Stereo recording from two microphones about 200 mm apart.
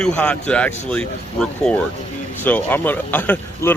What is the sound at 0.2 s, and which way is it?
Speech, 5° left (ahead or behind).